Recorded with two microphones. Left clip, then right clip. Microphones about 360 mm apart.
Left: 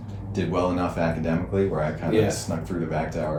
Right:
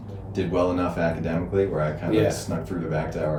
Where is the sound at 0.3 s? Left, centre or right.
Centre.